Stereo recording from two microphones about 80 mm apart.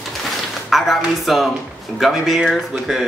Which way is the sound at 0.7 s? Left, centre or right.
Centre.